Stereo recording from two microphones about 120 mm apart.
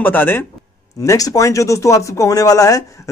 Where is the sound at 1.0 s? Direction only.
30° left (ahead or behind).